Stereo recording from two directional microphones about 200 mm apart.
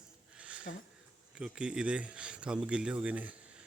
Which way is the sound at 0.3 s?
5° right (ahead or behind).